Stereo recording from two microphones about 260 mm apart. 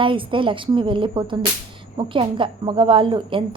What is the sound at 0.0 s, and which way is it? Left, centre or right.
A woman's voice, centre.